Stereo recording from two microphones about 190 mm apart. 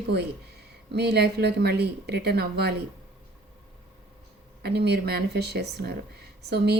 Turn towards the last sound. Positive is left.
turn(degrees=-60)  # may be behind; listen again after turning